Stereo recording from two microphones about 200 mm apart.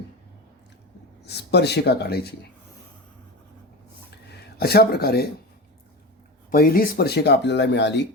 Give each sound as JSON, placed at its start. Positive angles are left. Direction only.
{"t": 1.2, "sound": "speech", "side_deg": 55}
{"t": 4.3, "sound": "speech", "side_deg": 50}
{"t": 6.5, "sound": "speech", "side_deg": 45}